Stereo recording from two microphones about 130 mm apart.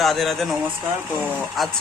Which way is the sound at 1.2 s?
15° right (ahead or behind).